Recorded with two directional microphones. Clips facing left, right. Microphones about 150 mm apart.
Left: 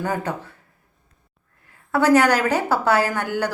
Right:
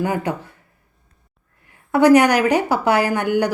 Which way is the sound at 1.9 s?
15° right (ahead or behind).